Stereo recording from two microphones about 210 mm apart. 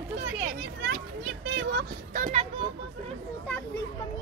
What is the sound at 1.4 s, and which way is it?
Speech, 65° right (ahead or behind).